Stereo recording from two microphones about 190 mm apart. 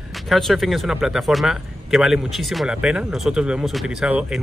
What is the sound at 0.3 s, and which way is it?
Speech, centre (ahead or behind).